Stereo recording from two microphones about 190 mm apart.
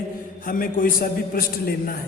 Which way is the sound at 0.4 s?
45° left (ahead or behind).